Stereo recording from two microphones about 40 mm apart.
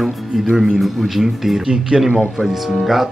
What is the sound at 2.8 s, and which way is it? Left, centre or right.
Speech, centre.